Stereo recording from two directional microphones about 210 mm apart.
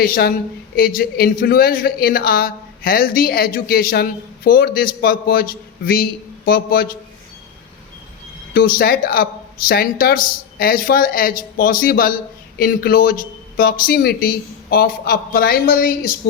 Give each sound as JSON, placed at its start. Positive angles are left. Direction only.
{"t": 0.0, "sound": "a woman's voice", "side_deg": 45}
{"t": 8.5, "sound": "a woman's voice", "side_deg": 45}